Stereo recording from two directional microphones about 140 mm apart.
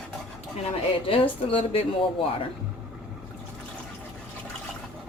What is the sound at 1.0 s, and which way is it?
Speech, 40° left (ahead or behind).